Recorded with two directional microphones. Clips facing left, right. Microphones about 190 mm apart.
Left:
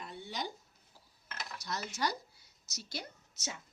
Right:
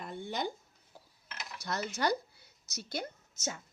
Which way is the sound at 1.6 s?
55° right (ahead or behind).